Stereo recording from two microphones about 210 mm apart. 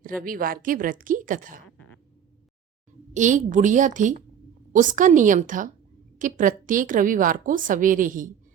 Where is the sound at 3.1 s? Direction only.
35° right (ahead or behind).